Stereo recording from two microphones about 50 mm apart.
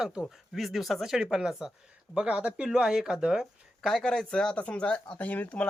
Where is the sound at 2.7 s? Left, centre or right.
Centre.